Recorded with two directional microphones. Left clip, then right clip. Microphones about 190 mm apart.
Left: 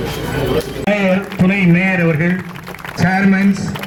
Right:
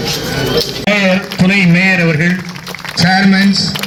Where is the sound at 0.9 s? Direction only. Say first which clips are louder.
Right 2 dB; 40° right (ahead or behind).